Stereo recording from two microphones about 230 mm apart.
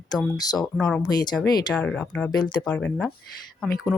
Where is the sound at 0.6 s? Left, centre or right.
Centre.